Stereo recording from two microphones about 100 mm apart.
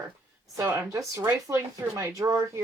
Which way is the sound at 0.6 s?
30° right (ahead or behind).